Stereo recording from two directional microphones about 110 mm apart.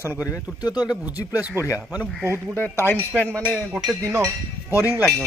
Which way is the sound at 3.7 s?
5° right (ahead or behind).